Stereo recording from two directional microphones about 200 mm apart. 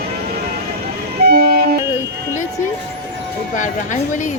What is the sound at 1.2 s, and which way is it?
Vehicle, 50° right (ahead or behind).